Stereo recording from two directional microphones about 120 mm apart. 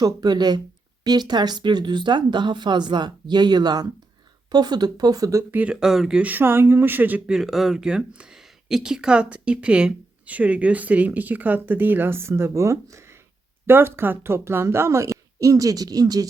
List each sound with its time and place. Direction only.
0.0 s speech: 35° right (ahead or behind); by 5.7 s 15° right (ahead or behind)
5.8 s speech: 5° right (ahead or behind)
7.3 s speech: centre (ahead or behind); by 16.2 s 30° right (ahead or behind)